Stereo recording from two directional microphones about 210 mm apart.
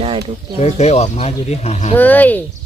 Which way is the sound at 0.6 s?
30° left (ahead or behind).